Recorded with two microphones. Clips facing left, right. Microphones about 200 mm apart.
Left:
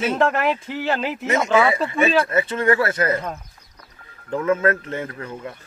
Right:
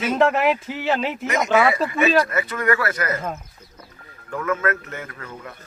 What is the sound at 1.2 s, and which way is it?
Speech, 30° left (ahead or behind).